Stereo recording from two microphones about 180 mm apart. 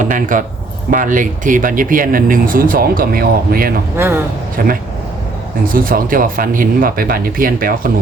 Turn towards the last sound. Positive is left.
turn(degrees=-50)  # may be behind; listen again after turning